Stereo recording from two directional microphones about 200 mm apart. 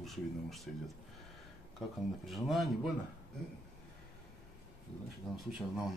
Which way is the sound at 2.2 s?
Centre (ahead or behind).